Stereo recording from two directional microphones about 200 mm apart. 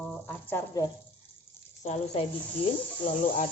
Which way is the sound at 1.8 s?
35° left (ahead or behind).